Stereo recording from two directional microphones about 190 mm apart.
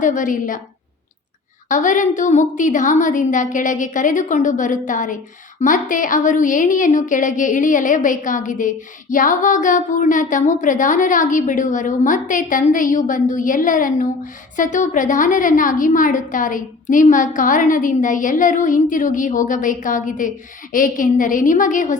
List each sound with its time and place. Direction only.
0.0 s a woman's voice: 40° left (ahead or behind)
1.7 s a woman's voice: 40° left (ahead or behind)